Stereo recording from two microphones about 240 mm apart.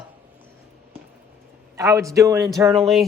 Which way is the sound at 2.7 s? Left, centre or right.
Centre.